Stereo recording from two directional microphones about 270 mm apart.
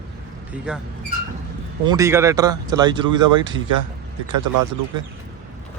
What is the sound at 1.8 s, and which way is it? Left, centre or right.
Speech, centre.